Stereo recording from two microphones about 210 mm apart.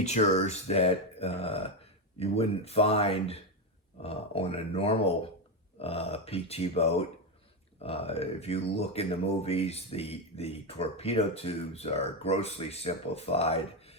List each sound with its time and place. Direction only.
0.0 s speech: 30° left (ahead or behind)